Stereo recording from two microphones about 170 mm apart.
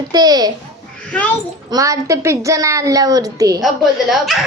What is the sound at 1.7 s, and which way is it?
A woman's voice, 20° right (ahead or behind).